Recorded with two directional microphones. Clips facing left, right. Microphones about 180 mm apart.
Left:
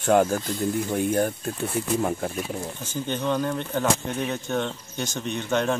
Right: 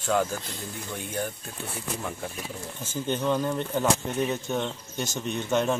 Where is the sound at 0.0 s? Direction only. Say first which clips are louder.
Left 6 dB; 55° left (ahead or behind).